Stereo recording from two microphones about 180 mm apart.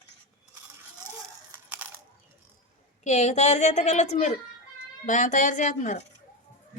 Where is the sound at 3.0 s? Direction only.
40° left (ahead or behind).